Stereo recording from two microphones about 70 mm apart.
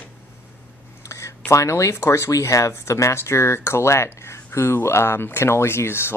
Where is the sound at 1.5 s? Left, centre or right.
Left.